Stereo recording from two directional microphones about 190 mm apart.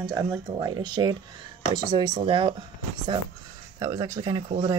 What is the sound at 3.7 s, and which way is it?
Speech, 20° right (ahead or behind).